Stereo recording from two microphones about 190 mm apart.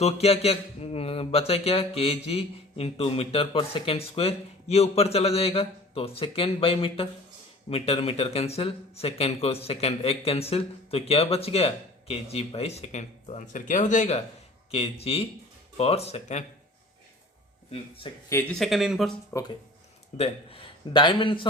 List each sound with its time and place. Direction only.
0.0 s speech: 35° left (ahead or behind)
17.7 s speech: 30° left (ahead or behind)
18.3 s speech: 15° left (ahead or behind)
18.5 s speech: centre (ahead or behind)
19.3 s speech: 15° left (ahead or behind)
20.1 s a man's voice: 30° left (ahead or behind)